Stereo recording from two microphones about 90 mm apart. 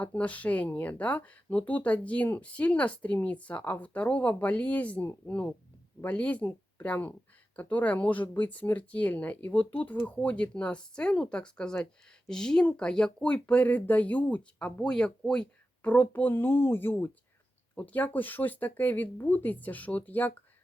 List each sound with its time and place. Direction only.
0.0 s speech: 15° left (ahead or behind)